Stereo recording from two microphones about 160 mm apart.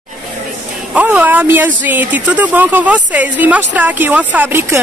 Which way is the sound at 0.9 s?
10° right (ahead or behind).